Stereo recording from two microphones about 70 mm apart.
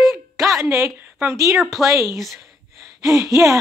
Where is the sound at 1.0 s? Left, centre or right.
Right.